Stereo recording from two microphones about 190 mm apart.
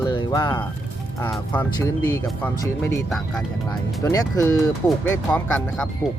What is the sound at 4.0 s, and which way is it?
Speech, 15° left (ahead or behind).